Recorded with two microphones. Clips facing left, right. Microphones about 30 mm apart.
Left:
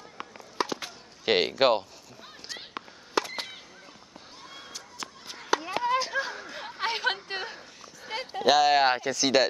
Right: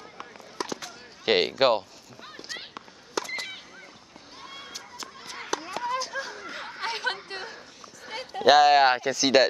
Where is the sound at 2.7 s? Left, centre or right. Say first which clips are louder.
Left 3 dB; centre.